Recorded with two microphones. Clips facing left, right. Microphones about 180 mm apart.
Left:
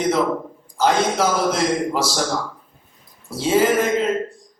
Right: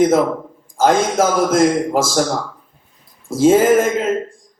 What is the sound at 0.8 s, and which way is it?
A man's voice, 45° right (ahead or behind).